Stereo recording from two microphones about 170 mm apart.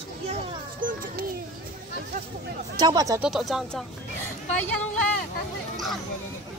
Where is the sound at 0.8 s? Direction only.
50° right (ahead or behind).